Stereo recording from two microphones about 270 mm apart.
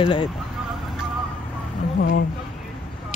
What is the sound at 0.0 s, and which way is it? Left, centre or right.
Speech, centre.